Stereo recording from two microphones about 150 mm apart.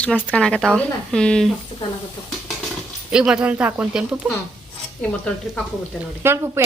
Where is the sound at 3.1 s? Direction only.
5° right (ahead or behind).